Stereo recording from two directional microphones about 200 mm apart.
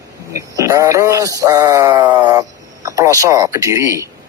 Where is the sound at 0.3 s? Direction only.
15° right (ahead or behind).